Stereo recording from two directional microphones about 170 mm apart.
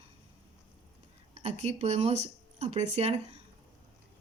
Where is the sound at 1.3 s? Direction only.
40° right (ahead or behind).